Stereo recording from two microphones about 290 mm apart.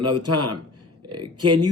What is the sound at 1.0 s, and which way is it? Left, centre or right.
Speech, centre.